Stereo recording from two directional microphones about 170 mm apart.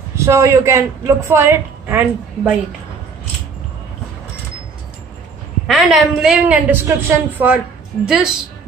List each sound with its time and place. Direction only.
0.1 s a woman's voice: 15° right (ahead or behind)
5.7 s a woman's voice: centre (ahead or behind)